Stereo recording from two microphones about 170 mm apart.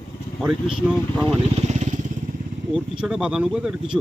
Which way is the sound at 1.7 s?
45° right (ahead or behind).